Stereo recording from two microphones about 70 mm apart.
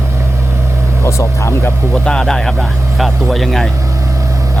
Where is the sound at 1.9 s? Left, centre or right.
Centre.